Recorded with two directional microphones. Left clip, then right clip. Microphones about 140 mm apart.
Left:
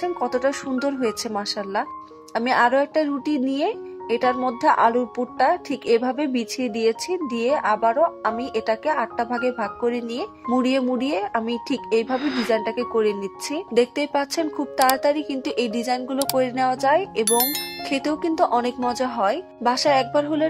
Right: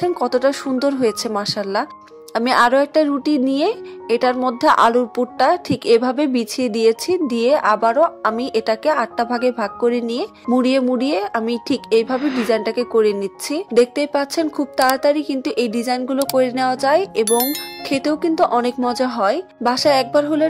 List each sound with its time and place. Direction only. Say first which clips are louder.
0.0 s a woman's voice: right 5 dB; 30° right (ahead or behind)
17.2 s speech: right 4 dB; centre (ahead or behind)
17.8 s speech: right 5 dB; 30° right (ahead or behind)